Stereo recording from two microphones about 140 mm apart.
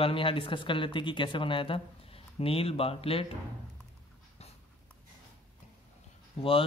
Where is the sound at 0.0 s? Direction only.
40° left (ahead or behind).